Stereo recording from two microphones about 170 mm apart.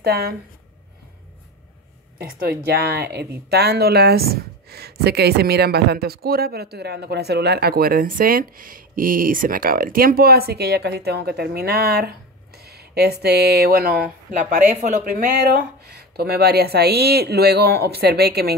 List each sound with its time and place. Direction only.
0.0 s speech: 65° right (ahead or behind)
2.6 s speech: 65° right (ahead or behind)